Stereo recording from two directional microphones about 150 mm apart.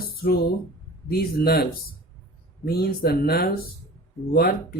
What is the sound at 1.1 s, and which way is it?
Speech, 90° left.